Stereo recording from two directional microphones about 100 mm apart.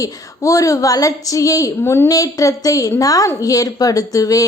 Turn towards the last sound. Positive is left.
turn(degrees=35)  # may be behind; listen again after turning